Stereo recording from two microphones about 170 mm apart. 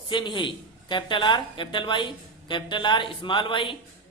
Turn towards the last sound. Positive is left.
turn(degrees=30)  # may be behind; listen again after turning